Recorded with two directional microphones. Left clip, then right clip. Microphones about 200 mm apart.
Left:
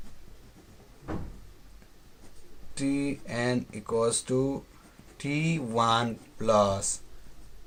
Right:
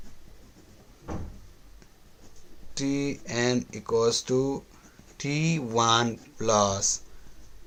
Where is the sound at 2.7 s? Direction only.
25° right (ahead or behind).